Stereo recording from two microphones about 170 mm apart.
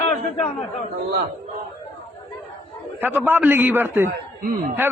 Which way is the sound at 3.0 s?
10° right (ahead or behind).